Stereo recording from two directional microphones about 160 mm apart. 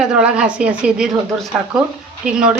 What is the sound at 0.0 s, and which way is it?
A woman's voice, 5° right (ahead or behind).